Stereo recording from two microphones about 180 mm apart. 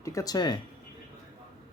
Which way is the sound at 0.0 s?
20° left (ahead or behind).